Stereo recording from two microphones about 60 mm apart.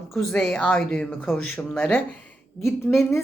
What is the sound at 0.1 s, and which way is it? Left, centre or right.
Speech, centre.